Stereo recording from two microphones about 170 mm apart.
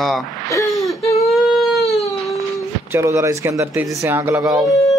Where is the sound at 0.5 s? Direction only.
20° left (ahead or behind).